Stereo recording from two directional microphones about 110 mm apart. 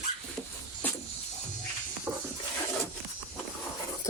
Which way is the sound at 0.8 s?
15° left (ahead or behind).